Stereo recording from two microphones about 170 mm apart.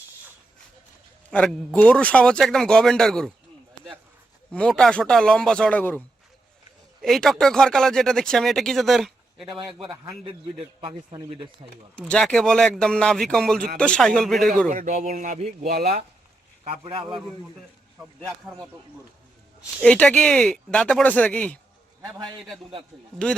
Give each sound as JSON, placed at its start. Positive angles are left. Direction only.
{"t": 1.3, "sound": "speech", "side_deg": 5}
{"t": 4.5, "sound": "speech", "side_deg": 5}
{"t": 7.0, "sound": "speech", "side_deg": 0}
{"t": 10.8, "sound": "a man's voice", "side_deg": -30}
{"t": 11.9, "sound": "speech", "side_deg": 5}
{"t": 14.7, "sound": "speech", "side_deg": -45}
{"t": 15.6, "sound": "speech", "side_deg": -70}
{"t": 16.6, "sound": "a man's voice", "side_deg": -35}
{"t": 19.8, "sound": "speech", "side_deg": 5}
{"t": 23.2, "sound": "speech", "side_deg": 5}